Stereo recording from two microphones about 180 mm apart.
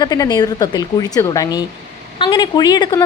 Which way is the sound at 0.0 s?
20° left (ahead or behind).